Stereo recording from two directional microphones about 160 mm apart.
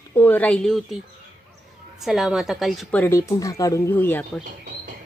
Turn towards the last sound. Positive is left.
turn(degrees=10)  # may be behind; listen again after turning